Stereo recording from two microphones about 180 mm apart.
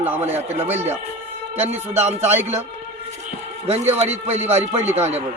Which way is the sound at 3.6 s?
35° right (ahead or behind).